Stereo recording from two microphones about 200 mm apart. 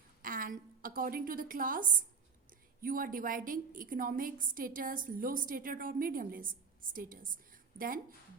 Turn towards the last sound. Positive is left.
turn(degrees=-45)  # may be behind; listen again after turning